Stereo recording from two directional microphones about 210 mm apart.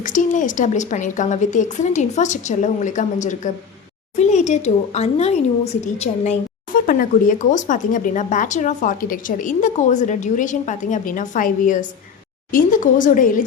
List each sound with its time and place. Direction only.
0.0 s a woman's voice: 40° left (ahead or behind)